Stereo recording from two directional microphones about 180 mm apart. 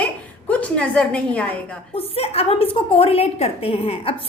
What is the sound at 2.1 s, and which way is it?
A woman's voice, 35° left (ahead or behind).